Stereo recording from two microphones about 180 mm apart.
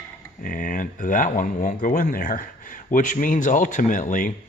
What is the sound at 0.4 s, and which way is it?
Speech, 50° left (ahead or behind).